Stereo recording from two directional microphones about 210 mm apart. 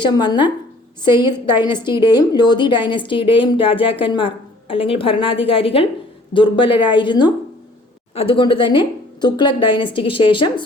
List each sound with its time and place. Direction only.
0.0 s speech: 20° left (ahead or behind)
1.6 s speech: 20° left (ahead or behind)